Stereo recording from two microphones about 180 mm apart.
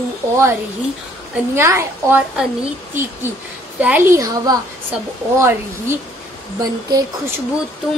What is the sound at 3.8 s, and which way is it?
A woman's voice, 10° right (ahead or behind).